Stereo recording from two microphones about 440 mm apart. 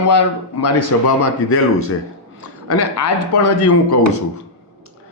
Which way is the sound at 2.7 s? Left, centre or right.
Left.